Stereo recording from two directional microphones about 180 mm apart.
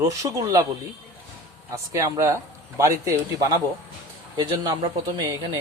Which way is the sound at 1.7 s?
15° right (ahead or behind).